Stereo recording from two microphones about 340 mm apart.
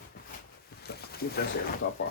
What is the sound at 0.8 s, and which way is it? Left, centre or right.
Boat, left.